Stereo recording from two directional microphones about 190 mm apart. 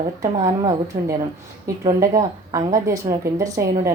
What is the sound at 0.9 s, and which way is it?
Speech, 30° right (ahead or behind).